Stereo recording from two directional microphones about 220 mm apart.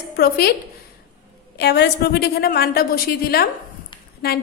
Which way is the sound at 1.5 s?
50° left (ahead or behind).